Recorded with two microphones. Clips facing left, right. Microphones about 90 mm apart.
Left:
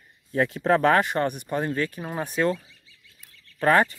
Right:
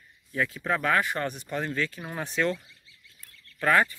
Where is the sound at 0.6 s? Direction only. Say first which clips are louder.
Left 7 dB; 40° left (ahead or behind).